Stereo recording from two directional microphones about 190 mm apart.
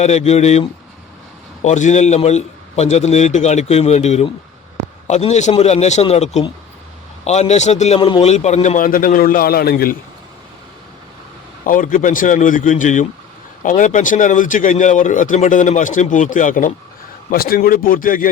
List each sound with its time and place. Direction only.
0.0 s a man's voice: 35° left (ahead or behind); by 9.9 s 55° left (ahead or behind)
11.6 s speech: 45° left (ahead or behind)